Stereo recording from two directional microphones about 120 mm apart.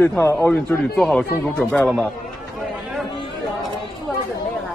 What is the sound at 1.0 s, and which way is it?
Speech, centre (ahead or behind).